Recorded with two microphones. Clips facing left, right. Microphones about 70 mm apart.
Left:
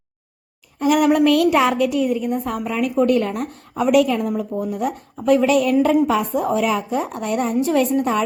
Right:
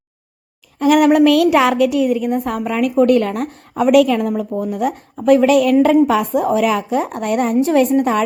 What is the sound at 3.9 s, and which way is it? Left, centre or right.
A woman's voice, right.